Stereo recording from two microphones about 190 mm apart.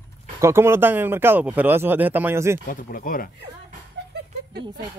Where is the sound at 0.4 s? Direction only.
15° right (ahead or behind).